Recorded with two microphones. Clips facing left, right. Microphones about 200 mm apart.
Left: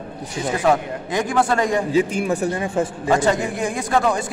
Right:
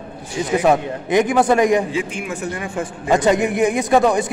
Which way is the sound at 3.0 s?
20° right (ahead or behind).